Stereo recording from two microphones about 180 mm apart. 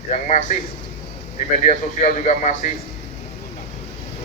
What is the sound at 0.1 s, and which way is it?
Speech, 40° left (ahead or behind).